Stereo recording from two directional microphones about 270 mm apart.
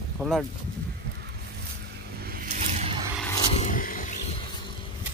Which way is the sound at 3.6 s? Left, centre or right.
Left.